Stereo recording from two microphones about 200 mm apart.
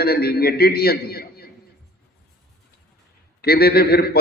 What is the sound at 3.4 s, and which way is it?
Mantra, 50° left (ahead or behind).